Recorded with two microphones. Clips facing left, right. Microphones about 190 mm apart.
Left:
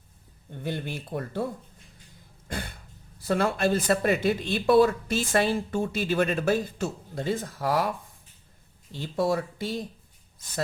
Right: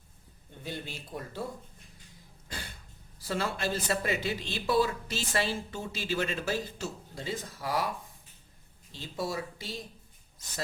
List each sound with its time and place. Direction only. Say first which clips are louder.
0.6 s speech: left 7 dB; 55° left (ahead or behind)
2.5 s throat clearing: left 8 dB; 55° left (ahead or behind)
3.2 s speech: left 8 dB; 55° left (ahead or behind)